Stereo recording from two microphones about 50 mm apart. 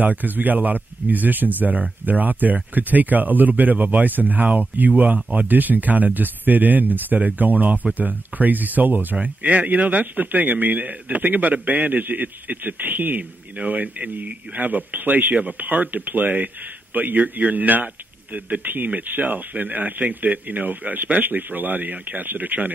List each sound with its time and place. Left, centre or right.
0.0 s speech: right